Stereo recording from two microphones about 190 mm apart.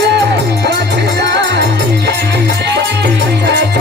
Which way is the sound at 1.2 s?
65° right (ahead or behind).